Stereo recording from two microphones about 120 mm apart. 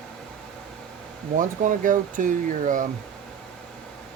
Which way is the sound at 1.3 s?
90° right.